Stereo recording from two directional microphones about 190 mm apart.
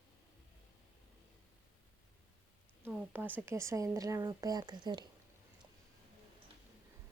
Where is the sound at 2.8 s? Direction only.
10° right (ahead or behind).